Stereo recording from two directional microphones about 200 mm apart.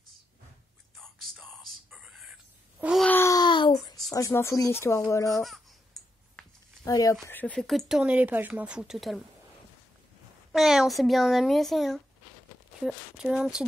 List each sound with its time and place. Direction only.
0.9 s whispering: centre (ahead or behind)
2.8 s a sound: centre (ahead or behind)
3.1 s a sound: 15° left (ahead or behind)
4.1 s speech: 15° left (ahead or behind)
5.3 s speech: centre (ahead or behind)
6.8 s speech: 15° left (ahead or behind); by 9.2 s centre (ahead or behind)
10.5 s speech: centre (ahead or behind)